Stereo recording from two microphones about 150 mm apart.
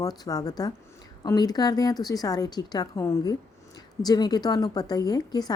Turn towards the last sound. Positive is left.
turn(degrees=25)  # may be behind; listen again after turning